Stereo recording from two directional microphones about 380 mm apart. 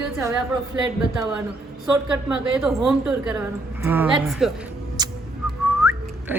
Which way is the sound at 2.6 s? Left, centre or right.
Centre.